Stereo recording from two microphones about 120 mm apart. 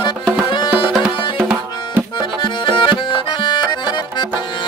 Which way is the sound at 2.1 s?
45° left (ahead or behind).